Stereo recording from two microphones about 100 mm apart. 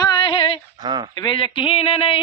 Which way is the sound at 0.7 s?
45° right (ahead or behind).